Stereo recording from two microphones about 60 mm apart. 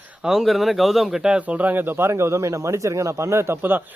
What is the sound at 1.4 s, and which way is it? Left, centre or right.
Speech, right.